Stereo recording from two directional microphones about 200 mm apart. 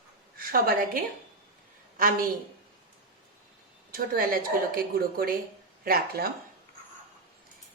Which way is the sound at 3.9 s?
45° right (ahead or behind).